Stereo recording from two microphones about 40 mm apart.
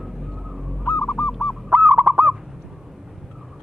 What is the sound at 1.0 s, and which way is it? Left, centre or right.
Goose, centre.